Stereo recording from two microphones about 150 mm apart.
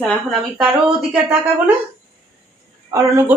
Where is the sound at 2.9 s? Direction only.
20° right (ahead or behind).